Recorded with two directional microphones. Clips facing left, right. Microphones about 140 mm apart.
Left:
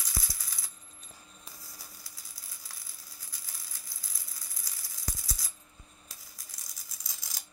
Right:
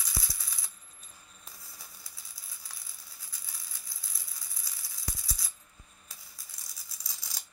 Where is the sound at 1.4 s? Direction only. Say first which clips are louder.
Even; centre (ahead or behind).